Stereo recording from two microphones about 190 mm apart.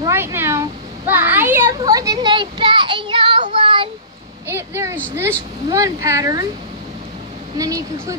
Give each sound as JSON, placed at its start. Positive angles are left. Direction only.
{"t": 0.0, "sound": "children playing", "side_deg": -10}
{"t": 1.8, "sound": "child singing", "side_deg": -20}
{"t": 4.5, "sound": "vehicle", "side_deg": -10}
{"t": 5.7, "sound": "speech", "side_deg": -15}
{"t": 7.5, "sound": "speech", "side_deg": -15}